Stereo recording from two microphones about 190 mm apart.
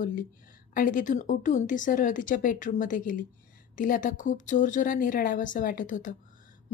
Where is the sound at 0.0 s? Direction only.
45° left (ahead or behind).